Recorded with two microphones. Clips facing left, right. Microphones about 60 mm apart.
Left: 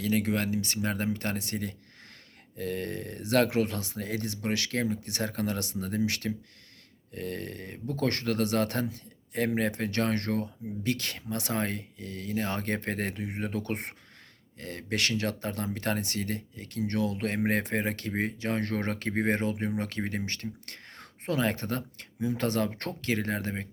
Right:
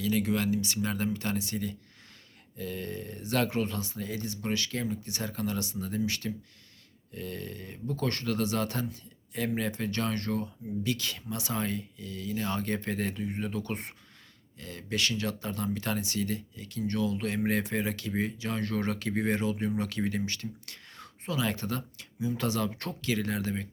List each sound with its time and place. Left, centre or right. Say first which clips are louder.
0.0 s speech: even; left